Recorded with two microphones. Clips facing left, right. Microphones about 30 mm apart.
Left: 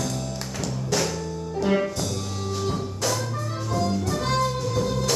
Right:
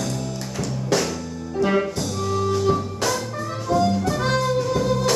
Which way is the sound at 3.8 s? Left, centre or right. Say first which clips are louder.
Right 4 dB; right.